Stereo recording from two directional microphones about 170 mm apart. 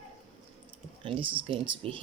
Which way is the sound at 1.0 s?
30° right (ahead or behind).